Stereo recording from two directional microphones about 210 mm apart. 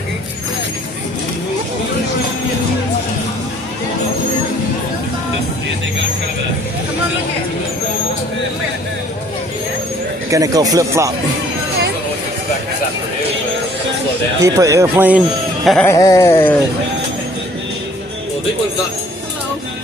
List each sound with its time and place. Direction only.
10.3 s speech: 15° right (ahead or behind)
14.4 s speech: 15° right (ahead or behind)
15.6 s music: centre (ahead or behind)
15.9 s a sound: 15° left (ahead or behind)